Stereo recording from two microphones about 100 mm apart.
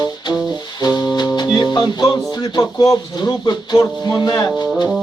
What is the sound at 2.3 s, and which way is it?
Speech, 40° left (ahead or behind).